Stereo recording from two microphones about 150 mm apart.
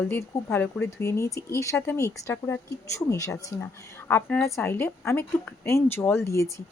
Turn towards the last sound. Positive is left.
turn(degrees=20)  # may be behind; listen again after turning